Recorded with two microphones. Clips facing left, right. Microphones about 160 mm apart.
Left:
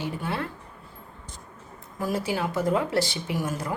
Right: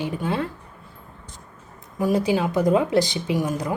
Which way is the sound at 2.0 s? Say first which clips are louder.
Right 7 dB; 15° right (ahead or behind).